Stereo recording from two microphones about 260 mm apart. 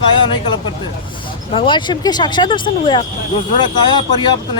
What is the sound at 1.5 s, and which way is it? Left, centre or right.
Speech, centre.